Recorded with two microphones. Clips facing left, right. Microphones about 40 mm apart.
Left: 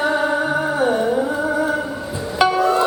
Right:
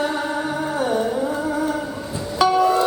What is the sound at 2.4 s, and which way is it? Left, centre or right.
Music, centre.